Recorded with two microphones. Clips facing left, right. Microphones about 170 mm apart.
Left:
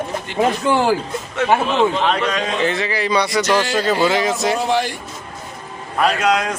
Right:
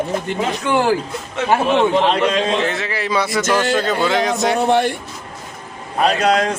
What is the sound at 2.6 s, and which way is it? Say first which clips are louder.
A man's voice: left 2 dB; centre (ahead or behind).